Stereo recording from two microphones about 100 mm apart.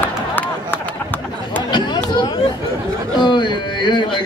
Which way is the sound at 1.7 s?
50° left (ahead or behind).